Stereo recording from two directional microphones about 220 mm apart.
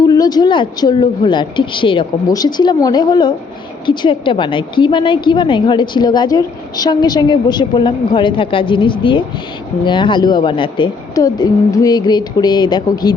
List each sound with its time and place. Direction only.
0.0 s a woman's voice: 15° left (ahead or behind)